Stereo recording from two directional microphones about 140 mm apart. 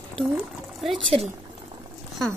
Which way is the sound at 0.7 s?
Centre (ahead or behind).